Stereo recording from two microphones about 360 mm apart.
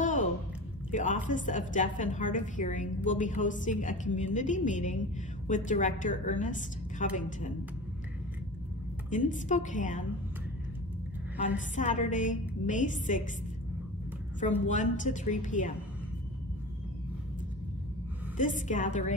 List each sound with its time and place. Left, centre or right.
0.0 s a sound: left
0.9 s a woman's voice: left
9.1 s a woman's voice: left
11.5 s a woman's voice: left
14.7 s a woman's voice: centre
18.4 s a woman's voice: left